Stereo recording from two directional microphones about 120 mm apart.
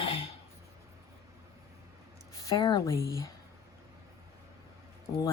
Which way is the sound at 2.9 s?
25° left (ahead or behind).